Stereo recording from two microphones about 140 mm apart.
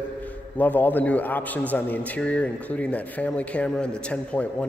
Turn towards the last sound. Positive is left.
turn(degrees=10)  # may be behind; listen again after turning